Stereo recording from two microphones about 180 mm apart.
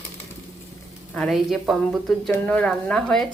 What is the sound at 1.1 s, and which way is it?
Speech, centre (ahead or behind).